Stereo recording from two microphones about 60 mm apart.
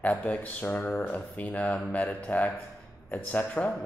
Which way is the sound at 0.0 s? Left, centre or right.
Left.